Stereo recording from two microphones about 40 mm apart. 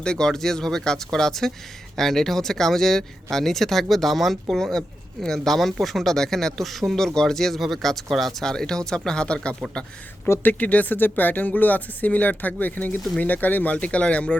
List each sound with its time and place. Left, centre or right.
0.0 s speech: centre
8.5 s speech: centre
9.2 s speech: left
10.4 s speech: left
10.9 s speech: left